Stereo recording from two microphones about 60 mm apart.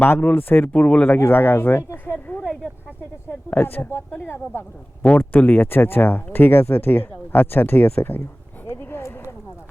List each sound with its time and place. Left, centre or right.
0.0 s speech: left
0.7 s speech: centre
1.0 s speech: left
2.0 s a sound: left
3.5 s speech: left
5.0 s speech: left
8.6 s a sound: left